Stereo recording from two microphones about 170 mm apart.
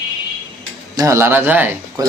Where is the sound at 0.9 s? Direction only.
20° right (ahead or behind).